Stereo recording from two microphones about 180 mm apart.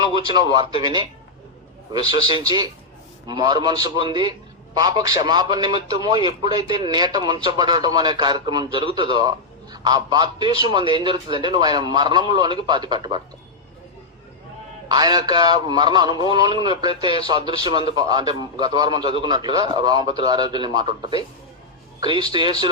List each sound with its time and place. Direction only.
0.0 s a man's voice: 25° right (ahead or behind)
14.8 s a man's voice: 20° right (ahead or behind)
22.3 s a man's voice: 25° right (ahead or behind)